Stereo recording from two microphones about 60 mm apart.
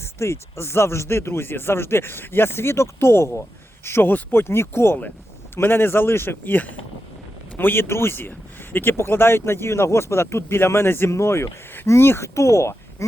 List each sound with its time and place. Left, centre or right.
0.0 s speech: left
3.8 s a man's voice: left